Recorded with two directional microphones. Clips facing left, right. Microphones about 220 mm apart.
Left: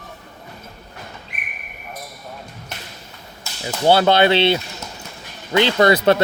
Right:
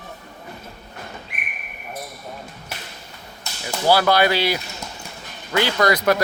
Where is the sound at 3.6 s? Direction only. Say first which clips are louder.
Left 3 dB; 25° left (ahead or behind).